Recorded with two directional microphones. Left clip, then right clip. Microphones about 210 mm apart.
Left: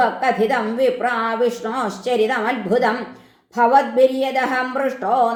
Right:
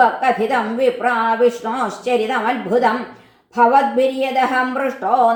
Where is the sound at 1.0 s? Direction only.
35° left (ahead or behind).